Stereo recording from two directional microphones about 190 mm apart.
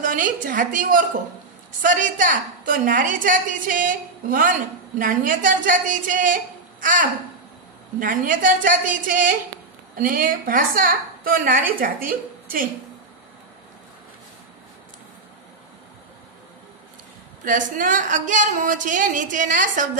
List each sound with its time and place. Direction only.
0.0 s a woman's voice: 45° right (ahead or behind)
17.5 s a woman's voice: 45° right (ahead or behind)